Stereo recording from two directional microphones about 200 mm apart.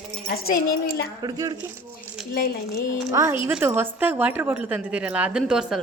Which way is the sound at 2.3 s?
50° left (ahead or behind).